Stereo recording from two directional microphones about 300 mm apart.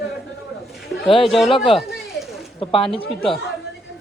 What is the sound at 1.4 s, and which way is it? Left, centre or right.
A man's voice, centre.